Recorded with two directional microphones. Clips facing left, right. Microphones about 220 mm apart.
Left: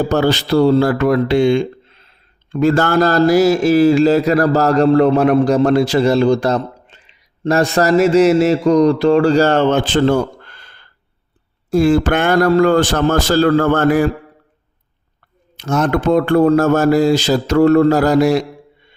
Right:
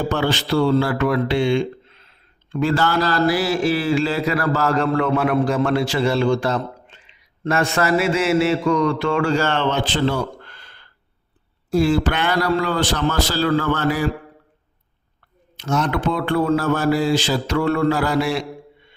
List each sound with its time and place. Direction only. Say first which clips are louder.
0.0 s speech: left 6 dB; 40° left (ahead or behind)
15.5 s speech: left 5 dB; 50° left (ahead or behind)